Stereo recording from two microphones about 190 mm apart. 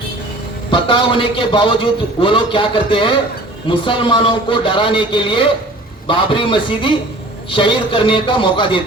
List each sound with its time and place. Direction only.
0.7 s a man's voice: 25° left (ahead or behind)